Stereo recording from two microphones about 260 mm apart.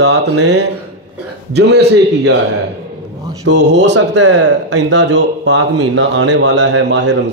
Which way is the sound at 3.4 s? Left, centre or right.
Right.